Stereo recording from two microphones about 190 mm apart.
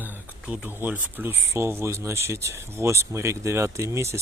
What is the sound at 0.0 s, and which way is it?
Speech, 10° right (ahead or behind).